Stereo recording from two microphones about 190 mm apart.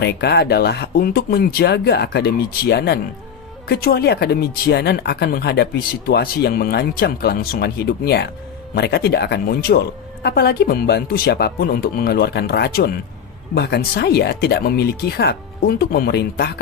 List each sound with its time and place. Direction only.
0.0 s speech: 60° left (ahead or behind)